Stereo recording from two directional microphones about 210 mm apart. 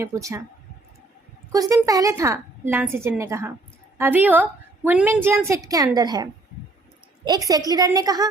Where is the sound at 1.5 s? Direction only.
15° right (ahead or behind).